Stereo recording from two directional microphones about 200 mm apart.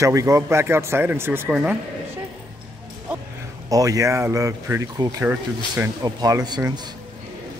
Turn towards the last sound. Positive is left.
turn(degrees=-20)  # may be behind; listen again after turning